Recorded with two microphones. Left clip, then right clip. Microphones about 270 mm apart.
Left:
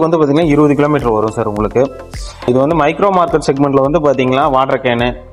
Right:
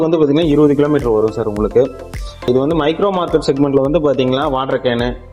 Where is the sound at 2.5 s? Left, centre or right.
Left.